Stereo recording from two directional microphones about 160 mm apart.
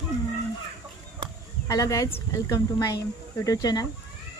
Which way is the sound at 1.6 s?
20° left (ahead or behind).